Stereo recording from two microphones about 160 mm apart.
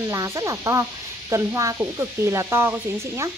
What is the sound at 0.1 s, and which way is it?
Speech, 20° right (ahead or behind).